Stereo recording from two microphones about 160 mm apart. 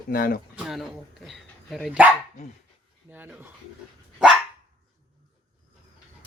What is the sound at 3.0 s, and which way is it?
Speech, 10° right (ahead or behind).